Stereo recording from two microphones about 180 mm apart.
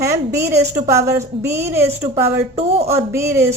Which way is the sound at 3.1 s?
15° right (ahead or behind).